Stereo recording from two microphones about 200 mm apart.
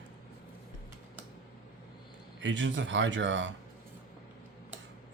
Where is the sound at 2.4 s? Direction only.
65° right (ahead or behind).